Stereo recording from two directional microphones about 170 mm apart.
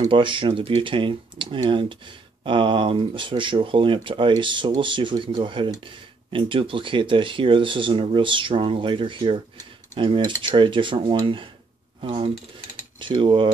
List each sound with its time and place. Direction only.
0.0 s speech: 30° right (ahead or behind)